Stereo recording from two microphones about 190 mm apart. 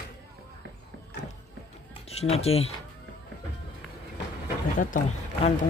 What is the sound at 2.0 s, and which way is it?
Speech, 35° left (ahead or behind).